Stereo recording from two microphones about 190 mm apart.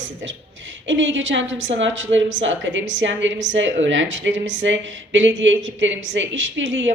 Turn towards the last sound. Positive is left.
turn(degrees=-75)  # may be behind; listen again after turning